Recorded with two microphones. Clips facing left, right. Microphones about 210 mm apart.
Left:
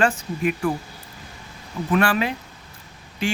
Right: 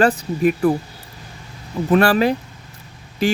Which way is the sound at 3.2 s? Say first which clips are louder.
Right 6 dB; 40° right (ahead or behind).